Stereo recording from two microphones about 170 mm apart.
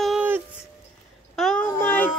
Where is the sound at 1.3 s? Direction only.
5° left (ahead or behind).